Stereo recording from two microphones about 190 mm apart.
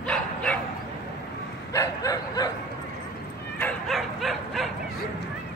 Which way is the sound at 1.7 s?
15° left (ahead or behind).